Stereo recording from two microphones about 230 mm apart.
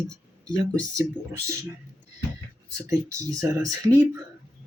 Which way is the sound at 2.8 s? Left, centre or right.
Centre.